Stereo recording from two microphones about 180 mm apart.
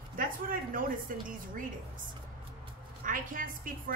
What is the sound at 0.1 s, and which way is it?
A woman's voice, 50° right (ahead or behind).